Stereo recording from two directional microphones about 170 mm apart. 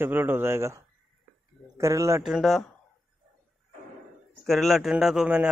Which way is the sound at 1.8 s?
15° right (ahead or behind).